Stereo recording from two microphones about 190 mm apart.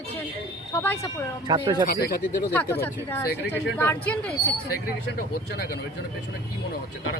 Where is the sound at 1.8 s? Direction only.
55° left (ahead or behind).